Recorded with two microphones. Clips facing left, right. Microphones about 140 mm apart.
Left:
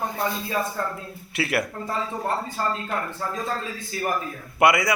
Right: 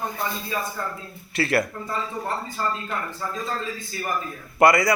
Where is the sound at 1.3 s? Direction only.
10° left (ahead or behind).